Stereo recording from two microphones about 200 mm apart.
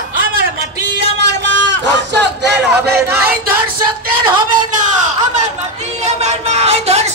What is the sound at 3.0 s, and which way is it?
Speech, 10° right (ahead or behind).